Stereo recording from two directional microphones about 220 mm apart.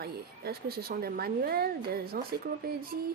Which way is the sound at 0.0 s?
45° right (ahead or behind).